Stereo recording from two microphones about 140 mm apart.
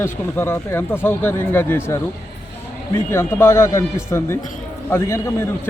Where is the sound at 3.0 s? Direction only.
15° left (ahead or behind).